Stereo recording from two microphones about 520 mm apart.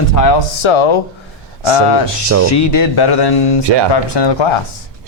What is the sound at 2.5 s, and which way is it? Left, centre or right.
Speech, left.